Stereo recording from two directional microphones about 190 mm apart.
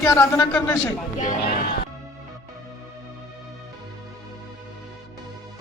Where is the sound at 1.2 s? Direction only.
40° left (ahead or behind).